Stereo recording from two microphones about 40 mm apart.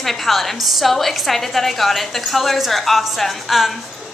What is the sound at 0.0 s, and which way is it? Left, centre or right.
A woman's voice, centre.